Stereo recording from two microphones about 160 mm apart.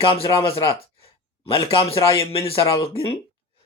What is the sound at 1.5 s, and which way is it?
Speech, 35° left (ahead or behind).